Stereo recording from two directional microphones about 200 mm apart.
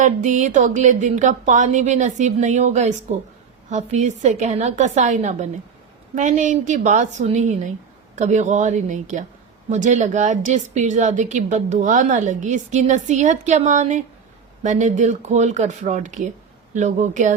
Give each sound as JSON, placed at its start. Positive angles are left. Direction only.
{"t": 0.0, "sound": "speech", "side_deg": -40}